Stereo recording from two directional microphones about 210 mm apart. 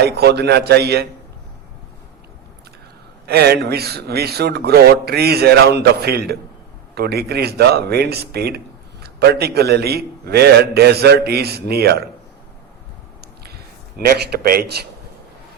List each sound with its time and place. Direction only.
0.0 s a man's voice: 50° right (ahead or behind)
3.2 s a man's voice: 50° right (ahead or behind)
14.0 s a man's voice: 45° right (ahead or behind)